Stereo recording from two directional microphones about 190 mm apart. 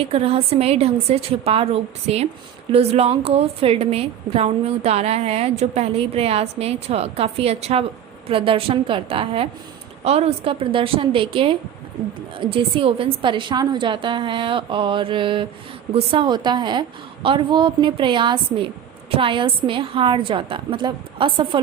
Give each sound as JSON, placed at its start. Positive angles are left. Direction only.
{"t": 0.0, "sound": "a woman's voice", "side_deg": -30}